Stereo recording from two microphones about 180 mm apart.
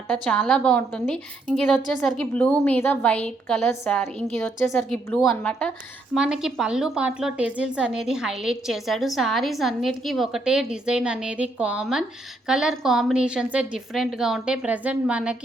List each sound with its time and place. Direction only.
0.3 s a woman's voice: 5° left (ahead or behind)